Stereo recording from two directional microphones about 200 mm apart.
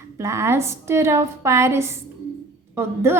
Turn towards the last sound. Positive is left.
turn(degrees=-10)  # may be behind; listen again after turning